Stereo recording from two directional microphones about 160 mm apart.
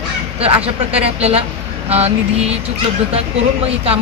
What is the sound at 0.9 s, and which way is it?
Speech, 40° right (ahead or behind).